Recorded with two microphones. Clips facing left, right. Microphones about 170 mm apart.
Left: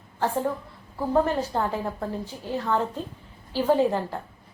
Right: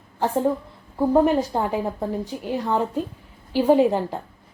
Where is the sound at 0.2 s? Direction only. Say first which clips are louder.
Right 4 dB; 15° right (ahead or behind).